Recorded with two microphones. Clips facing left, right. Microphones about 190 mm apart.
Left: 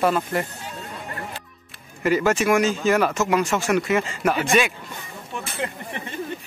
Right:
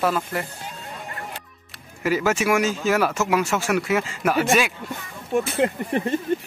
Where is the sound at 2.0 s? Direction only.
5° right (ahead or behind).